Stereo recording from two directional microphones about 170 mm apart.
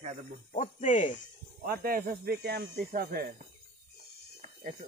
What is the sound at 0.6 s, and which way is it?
Speech, 45° left (ahead or behind).